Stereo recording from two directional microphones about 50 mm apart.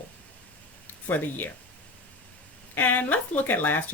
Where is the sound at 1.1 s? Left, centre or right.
Left.